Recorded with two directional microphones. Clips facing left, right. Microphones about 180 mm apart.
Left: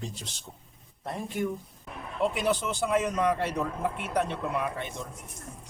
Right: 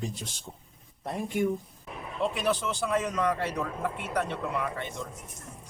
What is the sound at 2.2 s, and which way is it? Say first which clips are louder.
A man's voice: left 1 dB; 20° left (ahead or behind).